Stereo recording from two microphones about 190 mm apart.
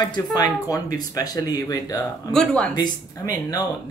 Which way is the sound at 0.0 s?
20° left (ahead or behind).